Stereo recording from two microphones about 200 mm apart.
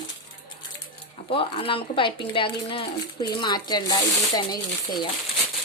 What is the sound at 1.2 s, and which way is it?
Speech, 25° left (ahead or behind).